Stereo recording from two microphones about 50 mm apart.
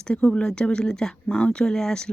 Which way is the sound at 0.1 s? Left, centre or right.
Centre.